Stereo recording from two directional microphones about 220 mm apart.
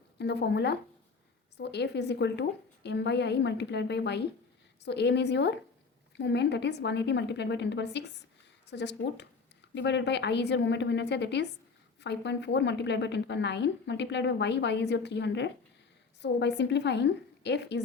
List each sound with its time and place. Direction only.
0.2 s a woman's voice: 50° left (ahead or behind)